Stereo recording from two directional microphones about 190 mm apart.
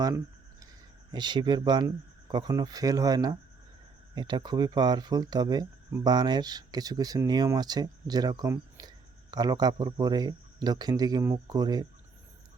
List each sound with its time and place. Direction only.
1.1 s speech: 25° right (ahead or behind)